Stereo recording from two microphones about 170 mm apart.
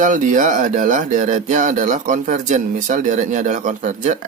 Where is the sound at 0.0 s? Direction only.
45° right (ahead or behind).